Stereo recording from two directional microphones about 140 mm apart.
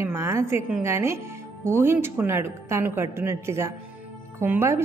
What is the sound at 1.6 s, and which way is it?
A woman's voice, 15° right (ahead or behind).